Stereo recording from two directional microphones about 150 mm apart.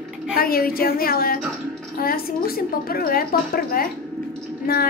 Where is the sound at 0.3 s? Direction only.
80° left.